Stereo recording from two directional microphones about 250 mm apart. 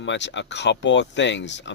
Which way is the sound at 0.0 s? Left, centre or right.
Left.